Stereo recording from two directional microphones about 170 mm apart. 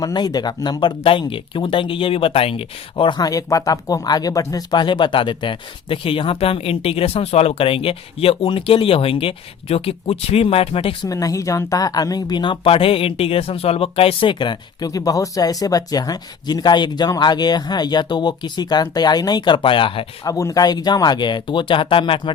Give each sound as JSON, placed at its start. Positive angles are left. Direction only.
{"t": 0.0, "sound": "speech", "side_deg": 25}
{"t": 11.0, "sound": "speech", "side_deg": 20}
{"t": 20.2, "sound": "speech", "side_deg": 20}